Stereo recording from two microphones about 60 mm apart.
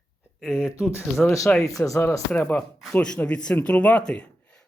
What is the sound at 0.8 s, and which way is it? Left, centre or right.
Speech, left.